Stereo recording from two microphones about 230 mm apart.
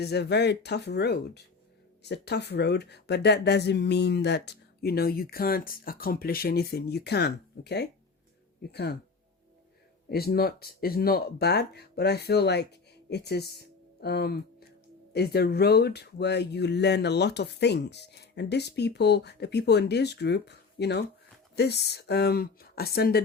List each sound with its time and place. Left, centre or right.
0.0 s speech: left
10.1 s speech: left
13.1 s music: left
15.1 s speech: left